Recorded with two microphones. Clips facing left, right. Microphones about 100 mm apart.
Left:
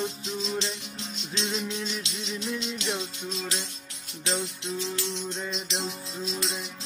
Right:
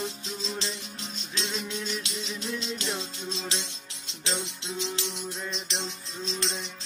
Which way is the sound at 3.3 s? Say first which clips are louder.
Even; 25° right (ahead or behind).